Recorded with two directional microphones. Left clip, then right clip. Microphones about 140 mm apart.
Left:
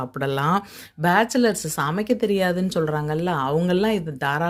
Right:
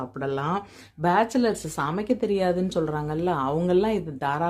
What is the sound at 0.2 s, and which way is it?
Speech, 25° left (ahead or behind).